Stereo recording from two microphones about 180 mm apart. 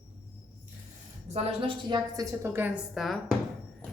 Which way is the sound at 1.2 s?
35° right (ahead or behind).